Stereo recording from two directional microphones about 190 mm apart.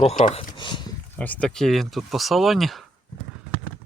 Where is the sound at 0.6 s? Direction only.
25° left (ahead or behind).